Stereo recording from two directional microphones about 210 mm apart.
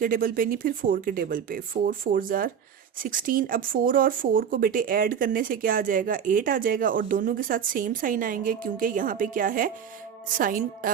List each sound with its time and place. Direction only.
0.0 s speech: 40° right (ahead or behind)